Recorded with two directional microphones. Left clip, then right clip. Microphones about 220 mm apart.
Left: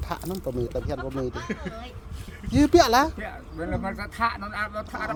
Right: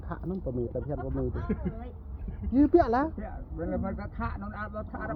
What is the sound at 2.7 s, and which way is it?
Speech, 15° left (ahead or behind).